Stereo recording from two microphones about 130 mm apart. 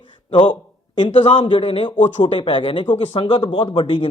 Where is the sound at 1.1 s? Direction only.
40° left (ahead or behind).